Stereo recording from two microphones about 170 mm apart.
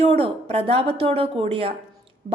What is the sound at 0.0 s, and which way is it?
A woman's voice, 35° right (ahead or behind).